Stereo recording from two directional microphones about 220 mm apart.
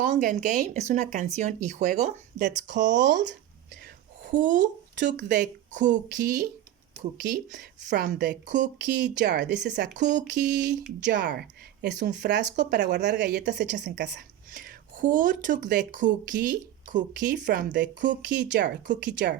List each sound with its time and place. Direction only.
0.0 s speech: 35° right (ahead or behind)
3.0 s a woman's voice: 50° right (ahead or behind)
4.3 s a woman's voice: 35° right (ahead or behind)